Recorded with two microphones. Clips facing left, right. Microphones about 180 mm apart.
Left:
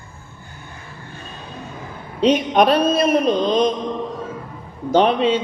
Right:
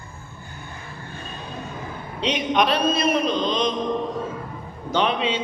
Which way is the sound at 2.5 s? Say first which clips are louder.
Left 3 dB; 45° left (ahead or behind).